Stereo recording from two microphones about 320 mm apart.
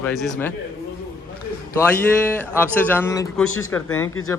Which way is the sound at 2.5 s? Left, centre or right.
Centre.